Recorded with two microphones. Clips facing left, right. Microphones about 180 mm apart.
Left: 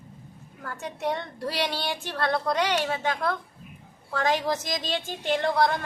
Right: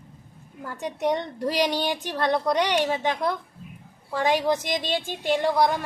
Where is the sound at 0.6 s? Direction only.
15° right (ahead or behind).